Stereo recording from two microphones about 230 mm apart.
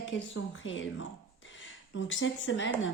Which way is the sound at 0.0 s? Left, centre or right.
Left.